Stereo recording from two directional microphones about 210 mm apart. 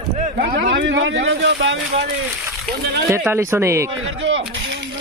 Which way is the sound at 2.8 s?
50° right (ahead or behind).